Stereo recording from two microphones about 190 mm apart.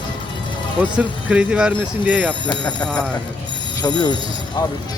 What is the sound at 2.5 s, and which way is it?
Speech, 25° left (ahead or behind).